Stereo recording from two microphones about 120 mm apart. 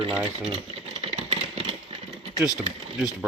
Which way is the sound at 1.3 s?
55° right (ahead or behind).